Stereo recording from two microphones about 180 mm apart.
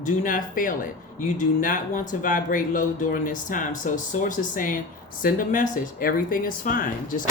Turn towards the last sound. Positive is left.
turn(degrees=50)  # may be behind; listen again after turning